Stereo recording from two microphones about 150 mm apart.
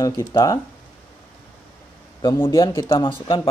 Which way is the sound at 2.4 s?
20° left (ahead or behind).